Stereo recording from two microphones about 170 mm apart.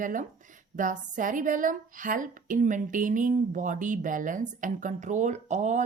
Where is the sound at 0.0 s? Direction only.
50° right (ahead or behind).